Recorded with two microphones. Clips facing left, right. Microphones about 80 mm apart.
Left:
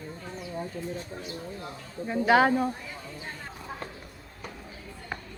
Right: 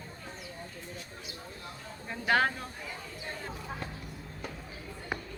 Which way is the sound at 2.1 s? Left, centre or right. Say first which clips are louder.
Left 7 dB; centre.